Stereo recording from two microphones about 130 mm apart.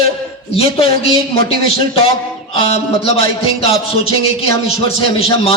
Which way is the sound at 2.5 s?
50° left (ahead or behind).